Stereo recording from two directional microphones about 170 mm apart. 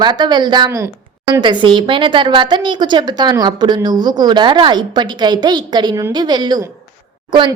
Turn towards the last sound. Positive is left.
turn(degrees=-25)  # may be behind; listen again after turning